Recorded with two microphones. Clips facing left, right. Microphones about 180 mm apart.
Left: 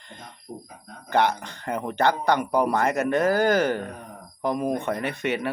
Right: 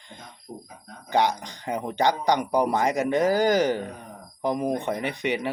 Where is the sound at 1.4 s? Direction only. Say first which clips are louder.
Even; 15° right (ahead or behind).